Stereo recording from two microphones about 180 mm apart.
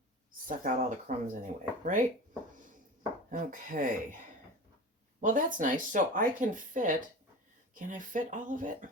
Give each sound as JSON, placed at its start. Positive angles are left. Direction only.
{"t": 0.4, "sound": "speech", "side_deg": -50}
{"t": 3.3, "sound": "speech", "side_deg": -50}
{"t": 5.2, "sound": "speech", "side_deg": -45}